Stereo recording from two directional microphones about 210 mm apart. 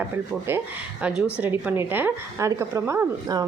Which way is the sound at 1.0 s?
5° right (ahead or behind).